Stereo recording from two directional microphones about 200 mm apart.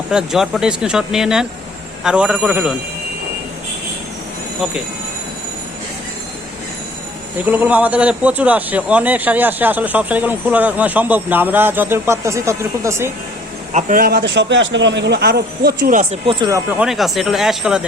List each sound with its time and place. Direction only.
0.1 s speech: 5° right (ahead or behind)
7.3 s a man's voice: 10° right (ahead or behind)
13.7 s speech: 40° right (ahead or behind)
16.2 s speech: 25° right (ahead or behind); by 17.8 s centre (ahead or behind)